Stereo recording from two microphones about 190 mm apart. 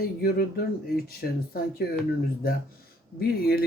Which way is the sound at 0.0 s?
55° left (ahead or behind).